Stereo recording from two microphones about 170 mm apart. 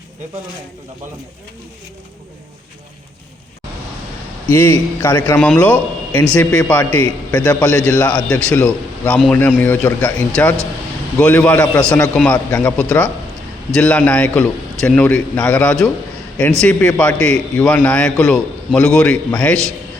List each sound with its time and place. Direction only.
4.4 s a man's voice: 10° left (ahead or behind)